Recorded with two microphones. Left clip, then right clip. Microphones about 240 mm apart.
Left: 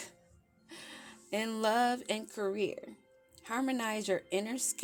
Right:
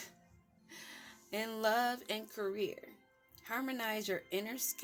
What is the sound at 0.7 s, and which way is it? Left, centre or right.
Music, left.